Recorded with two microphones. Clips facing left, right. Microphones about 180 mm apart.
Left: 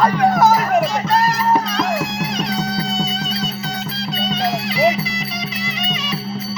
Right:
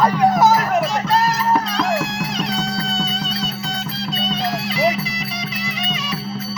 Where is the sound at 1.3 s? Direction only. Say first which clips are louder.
Left 1 dB; 15° left (ahead or behind).